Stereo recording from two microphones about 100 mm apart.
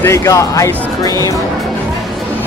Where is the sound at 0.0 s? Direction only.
25° left (ahead or behind).